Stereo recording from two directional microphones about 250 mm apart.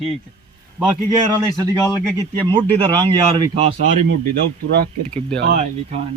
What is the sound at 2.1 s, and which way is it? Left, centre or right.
Speech, centre.